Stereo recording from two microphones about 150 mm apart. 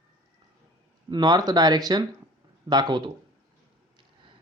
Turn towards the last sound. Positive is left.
turn(degrees=-30)  # may be behind; listen again after turning